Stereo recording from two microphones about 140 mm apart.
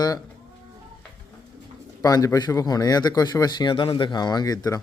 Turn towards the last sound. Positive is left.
turn(degrees=25)  # may be behind; listen again after turning